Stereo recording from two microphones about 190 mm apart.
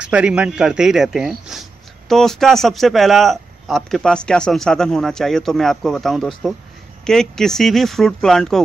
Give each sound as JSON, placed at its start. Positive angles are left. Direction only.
{"t": 0.0, "sound": "speech", "side_deg": -5}